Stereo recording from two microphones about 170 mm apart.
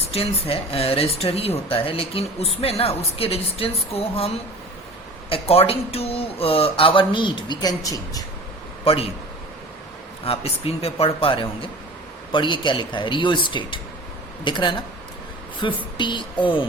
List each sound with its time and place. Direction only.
0.1 s speech: 35° left (ahead or behind)
5.3 s speech: 35° left (ahead or behind)
8.8 s a man's voice: 35° left (ahead or behind)
10.2 s speech: 35° left (ahead or behind)